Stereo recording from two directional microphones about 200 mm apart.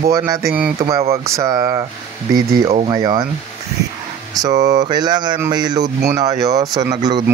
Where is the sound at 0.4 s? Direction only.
50° right (ahead or behind).